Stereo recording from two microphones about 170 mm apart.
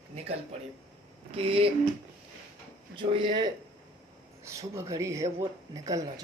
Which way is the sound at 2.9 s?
30° right (ahead or behind).